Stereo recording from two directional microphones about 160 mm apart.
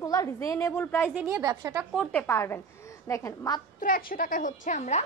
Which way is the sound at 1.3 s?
20° right (ahead or behind).